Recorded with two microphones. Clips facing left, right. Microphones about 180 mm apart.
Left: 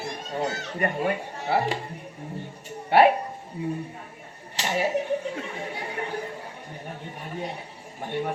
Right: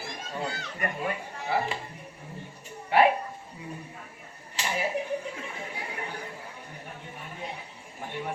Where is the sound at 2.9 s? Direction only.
65° left (ahead or behind).